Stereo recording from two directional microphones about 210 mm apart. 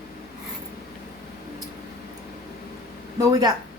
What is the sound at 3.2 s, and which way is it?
Speech, 20° right (ahead or behind).